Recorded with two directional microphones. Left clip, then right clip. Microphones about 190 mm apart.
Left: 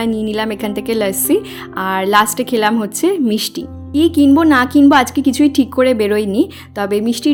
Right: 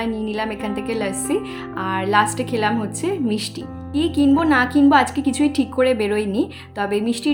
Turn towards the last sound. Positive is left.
turn(degrees=35)  # may be behind; listen again after turning